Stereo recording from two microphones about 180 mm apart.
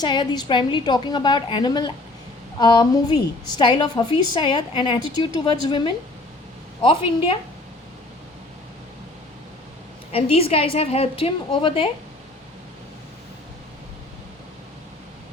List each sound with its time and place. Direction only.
0.0 s a woman's voice: 25° left (ahead or behind)
10.1 s a woman's voice: 35° left (ahead or behind)